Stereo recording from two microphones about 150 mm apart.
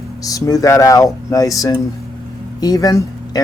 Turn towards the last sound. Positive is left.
turn(degrees=20)  # may be behind; listen again after turning